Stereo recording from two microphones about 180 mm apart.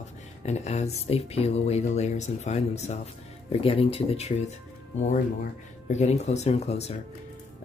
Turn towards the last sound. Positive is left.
turn(degrees=35)  # may be behind; listen again after turning